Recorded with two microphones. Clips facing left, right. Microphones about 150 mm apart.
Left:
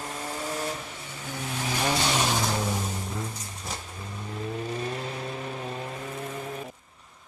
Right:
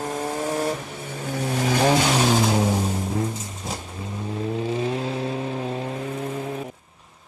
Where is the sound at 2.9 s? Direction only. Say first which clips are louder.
Right 9 dB; 25° right (ahead or behind).